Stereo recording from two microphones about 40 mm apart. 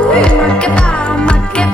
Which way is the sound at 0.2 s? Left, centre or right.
Left.